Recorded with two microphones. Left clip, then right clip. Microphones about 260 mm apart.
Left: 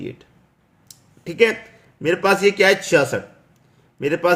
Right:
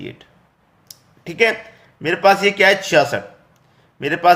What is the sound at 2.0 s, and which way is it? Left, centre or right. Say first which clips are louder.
A man's voice: right 3 dB; centre.